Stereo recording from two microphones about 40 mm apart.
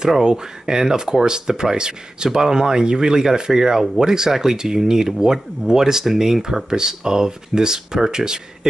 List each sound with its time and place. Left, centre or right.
0.2 s speech: centre